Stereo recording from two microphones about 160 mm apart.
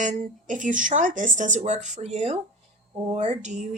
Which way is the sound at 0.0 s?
55° right (ahead or behind).